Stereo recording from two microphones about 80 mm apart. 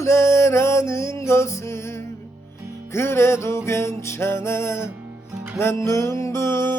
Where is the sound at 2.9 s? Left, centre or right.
Left.